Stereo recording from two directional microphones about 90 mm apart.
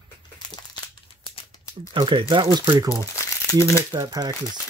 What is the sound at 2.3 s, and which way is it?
Speech, 55° right (ahead or behind).